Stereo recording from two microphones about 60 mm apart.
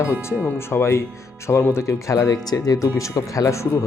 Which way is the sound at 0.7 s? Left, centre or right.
Left.